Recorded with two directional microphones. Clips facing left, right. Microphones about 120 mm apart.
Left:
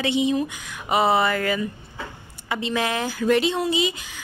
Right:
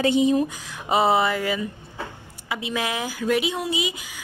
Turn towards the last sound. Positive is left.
turn(degrees=-10)  # may be behind; listen again after turning